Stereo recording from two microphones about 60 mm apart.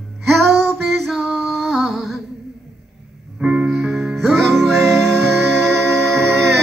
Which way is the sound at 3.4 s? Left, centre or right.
Centre.